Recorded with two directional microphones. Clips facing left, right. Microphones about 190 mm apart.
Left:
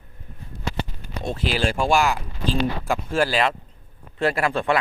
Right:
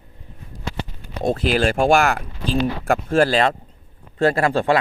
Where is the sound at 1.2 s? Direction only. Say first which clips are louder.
Right 5 dB; 50° right (ahead or behind).